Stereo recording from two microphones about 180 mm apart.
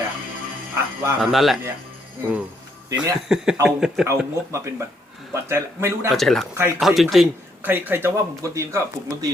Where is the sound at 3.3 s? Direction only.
5° right (ahead or behind).